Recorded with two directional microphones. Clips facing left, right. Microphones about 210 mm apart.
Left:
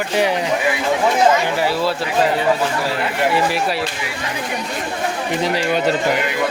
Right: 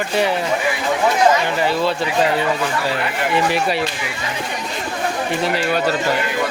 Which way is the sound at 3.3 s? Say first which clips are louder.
Right 1 dB; centre (ahead or behind).